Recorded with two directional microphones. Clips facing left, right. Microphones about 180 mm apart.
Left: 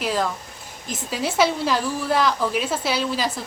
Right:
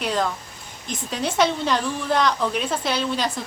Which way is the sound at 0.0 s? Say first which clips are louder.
Even; 5° left (ahead or behind).